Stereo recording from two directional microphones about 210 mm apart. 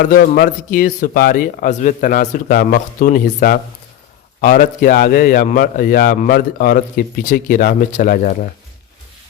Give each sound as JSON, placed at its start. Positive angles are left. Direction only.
{"t": 0.0, "sound": "a man's voice", "side_deg": 40}